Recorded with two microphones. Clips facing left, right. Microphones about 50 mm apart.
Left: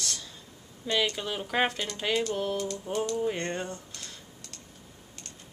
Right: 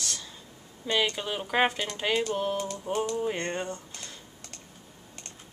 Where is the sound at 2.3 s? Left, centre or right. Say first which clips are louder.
Right 1 dB; centre.